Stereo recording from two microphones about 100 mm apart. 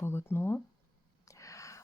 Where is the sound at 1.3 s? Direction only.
30° left (ahead or behind).